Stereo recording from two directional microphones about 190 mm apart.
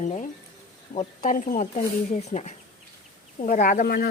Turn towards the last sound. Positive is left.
turn(degrees=55)  # may be behind; listen again after turning